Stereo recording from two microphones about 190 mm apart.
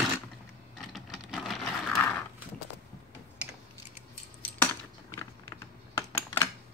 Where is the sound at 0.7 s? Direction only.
Centre (ahead or behind).